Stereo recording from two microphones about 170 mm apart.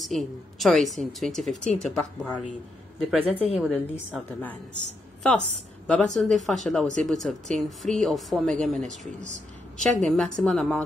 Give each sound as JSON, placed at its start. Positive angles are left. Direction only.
{"t": 0.0, "sound": "a woman's voice", "side_deg": 0}
{"t": 5.2, "sound": "a woman's voice", "side_deg": 5}
{"t": 8.8, "sound": "speech", "side_deg": -45}
{"t": 9.9, "sound": "a woman's voice", "side_deg": 5}